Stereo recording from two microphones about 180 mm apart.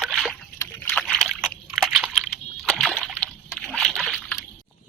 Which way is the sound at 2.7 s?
Centre (ahead or behind).